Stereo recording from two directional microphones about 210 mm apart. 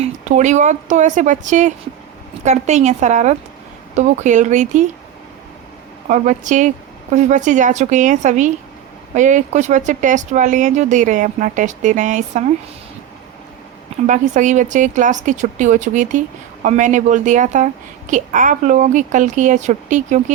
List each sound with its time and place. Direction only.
0.0 s speech: 35° right (ahead or behind)
6.1 s speech: 35° right (ahead or behind)
14.1 s speech: 35° right (ahead or behind)